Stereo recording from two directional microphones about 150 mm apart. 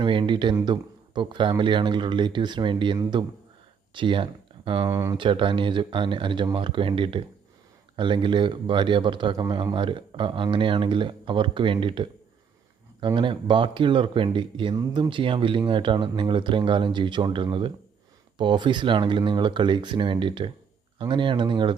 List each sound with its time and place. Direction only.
0.0 s a man's voice: 30° right (ahead or behind)
4.9 s speech: 20° right (ahead or behind)
5.1 s a man's voice: 35° right (ahead or behind)